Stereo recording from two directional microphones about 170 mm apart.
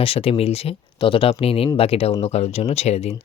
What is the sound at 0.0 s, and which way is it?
Speech, 35° left (ahead or behind).